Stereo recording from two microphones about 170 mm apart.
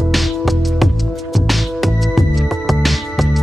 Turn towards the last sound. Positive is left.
turn(degrees=0)  # may be behind; listen again after turning